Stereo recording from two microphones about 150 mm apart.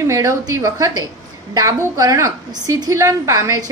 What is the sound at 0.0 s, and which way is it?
A woman's voice, 20° right (ahead or behind).